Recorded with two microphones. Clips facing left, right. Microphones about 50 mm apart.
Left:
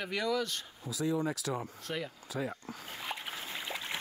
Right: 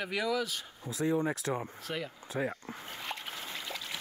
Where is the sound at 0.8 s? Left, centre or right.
Right.